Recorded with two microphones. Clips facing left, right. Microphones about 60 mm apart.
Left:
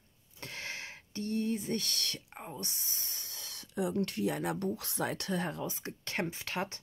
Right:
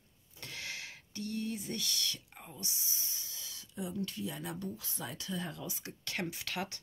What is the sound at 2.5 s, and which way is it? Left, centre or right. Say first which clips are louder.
Speech: right 1 dB; left.